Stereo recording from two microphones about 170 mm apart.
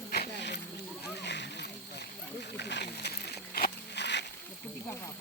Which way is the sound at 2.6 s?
85° left.